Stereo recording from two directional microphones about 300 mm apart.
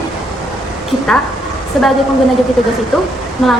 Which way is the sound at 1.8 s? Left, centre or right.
Centre.